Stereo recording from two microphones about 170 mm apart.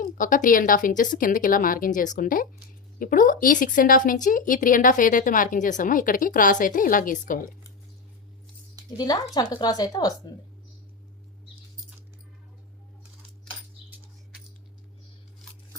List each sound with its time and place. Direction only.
0.0 s speech: 50° left (ahead or behind)
9.0 s speech: 20° left (ahead or behind)